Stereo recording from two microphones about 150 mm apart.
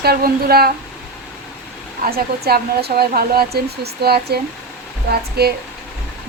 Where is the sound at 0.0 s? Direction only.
90° right.